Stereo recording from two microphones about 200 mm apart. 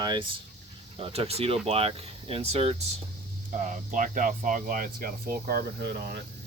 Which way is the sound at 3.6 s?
40° right (ahead or behind).